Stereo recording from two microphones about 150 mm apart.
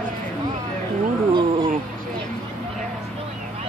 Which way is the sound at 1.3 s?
35° right (ahead or behind).